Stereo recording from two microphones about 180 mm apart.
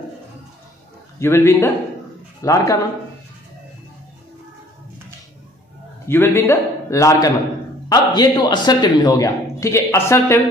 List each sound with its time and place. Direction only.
1.2 s a man's voice: 15° left (ahead or behind)
6.0 s a man's voice: 15° left (ahead or behind)